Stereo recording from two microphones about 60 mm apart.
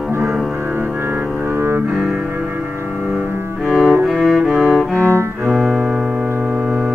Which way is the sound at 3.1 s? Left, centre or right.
Right.